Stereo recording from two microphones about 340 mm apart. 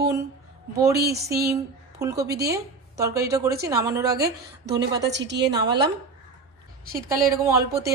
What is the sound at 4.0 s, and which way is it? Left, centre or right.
Speech, right.